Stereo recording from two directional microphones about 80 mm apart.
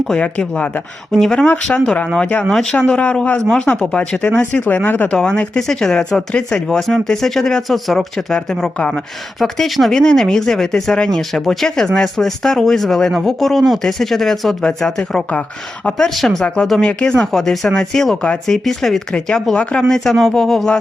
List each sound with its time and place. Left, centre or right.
0.1 s speech: centre
1.1 s speech: centre; by 5.1 s left
5.1 s speech: centre